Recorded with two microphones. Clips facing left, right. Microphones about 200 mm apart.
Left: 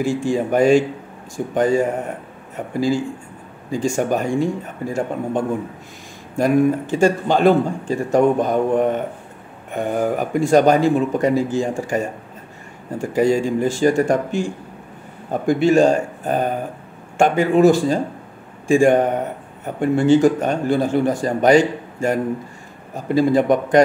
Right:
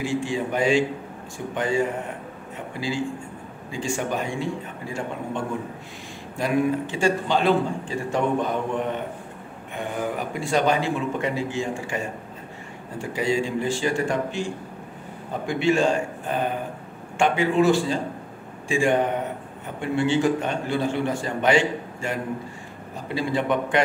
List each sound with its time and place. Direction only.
0.0 s a man's voice: 45° left (ahead or behind)
13.0 s a man's voice: 45° left (ahead or behind)